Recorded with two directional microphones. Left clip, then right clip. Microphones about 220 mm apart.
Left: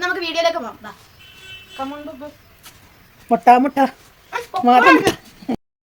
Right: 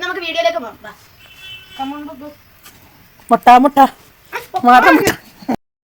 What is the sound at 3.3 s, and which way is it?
Speech, 20° right (ahead or behind).